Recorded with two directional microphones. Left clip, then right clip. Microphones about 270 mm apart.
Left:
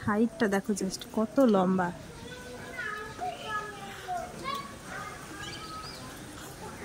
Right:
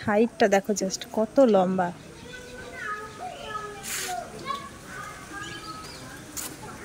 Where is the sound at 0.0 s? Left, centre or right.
Centre.